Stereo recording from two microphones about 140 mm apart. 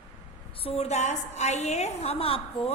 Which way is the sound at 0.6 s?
50° left (ahead or behind).